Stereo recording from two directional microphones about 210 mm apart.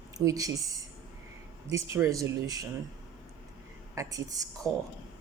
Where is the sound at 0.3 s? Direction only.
15° right (ahead or behind).